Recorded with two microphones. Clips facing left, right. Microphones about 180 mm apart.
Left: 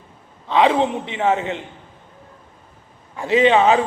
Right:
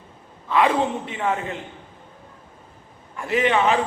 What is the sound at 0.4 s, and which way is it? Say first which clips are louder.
A man's voice: left 3 dB; 20° left (ahead or behind).